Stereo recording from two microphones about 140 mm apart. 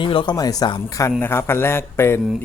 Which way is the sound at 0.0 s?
35° left (ahead or behind).